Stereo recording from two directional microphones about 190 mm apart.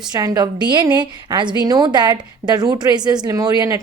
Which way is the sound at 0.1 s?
20° right (ahead or behind).